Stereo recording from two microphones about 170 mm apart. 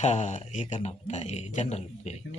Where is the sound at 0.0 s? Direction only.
45° left (ahead or behind).